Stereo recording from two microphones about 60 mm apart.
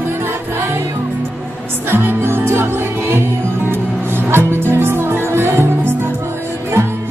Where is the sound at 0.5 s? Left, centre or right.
Right.